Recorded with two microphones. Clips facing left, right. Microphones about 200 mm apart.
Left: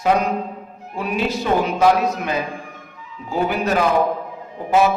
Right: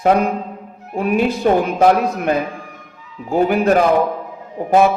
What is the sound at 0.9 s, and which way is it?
A man's voice, 55° right (ahead or behind).